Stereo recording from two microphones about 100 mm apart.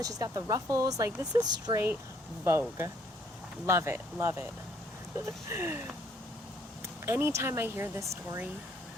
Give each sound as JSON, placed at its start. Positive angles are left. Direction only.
{"t": 0.0, "sound": "speech", "side_deg": -35}
{"t": 2.4, "sound": "speech", "side_deg": -25}
{"t": 5.5, "sound": "speech", "side_deg": -25}
{"t": 7.0, "sound": "speech", "side_deg": -25}